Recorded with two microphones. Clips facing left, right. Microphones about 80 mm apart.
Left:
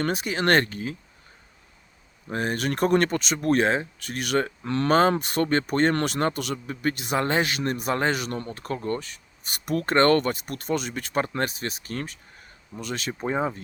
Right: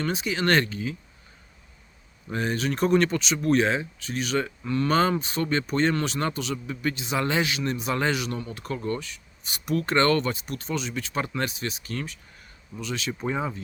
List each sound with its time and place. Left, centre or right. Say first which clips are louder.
0.0 s speech: left 1 dB; left
2.3 s speech: left 1 dB; left
4.6 s speech: even; left
4.9 s speech: left 4 dB; left
5.1 s speech: left 3 dB; left
7.2 s speech: left 1 dB; left